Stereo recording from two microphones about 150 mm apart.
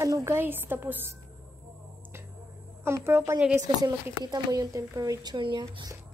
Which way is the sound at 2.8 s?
15° right (ahead or behind).